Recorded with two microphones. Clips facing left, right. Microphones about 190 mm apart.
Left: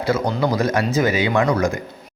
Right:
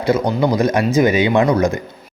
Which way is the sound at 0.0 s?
15° right (ahead or behind).